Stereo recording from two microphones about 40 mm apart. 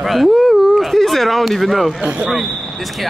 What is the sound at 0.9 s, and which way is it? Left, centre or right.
Speech, centre.